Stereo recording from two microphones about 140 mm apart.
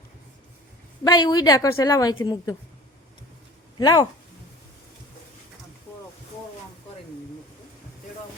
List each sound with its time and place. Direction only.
1.0 s a woman's voice: 30° left (ahead or behind)
3.8 s speech: 30° left (ahead or behind)